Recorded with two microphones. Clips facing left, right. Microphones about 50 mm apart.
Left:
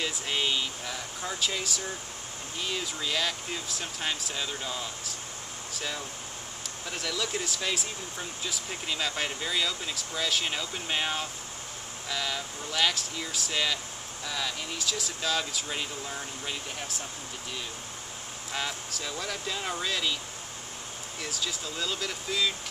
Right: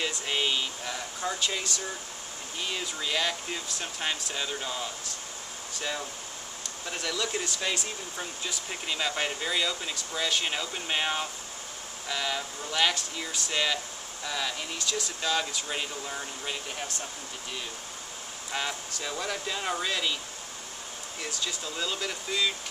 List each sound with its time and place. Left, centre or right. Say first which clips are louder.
0.3 s speech: even; centre
18.5 s speech: right 1 dB; centre
21.2 s speech: even; centre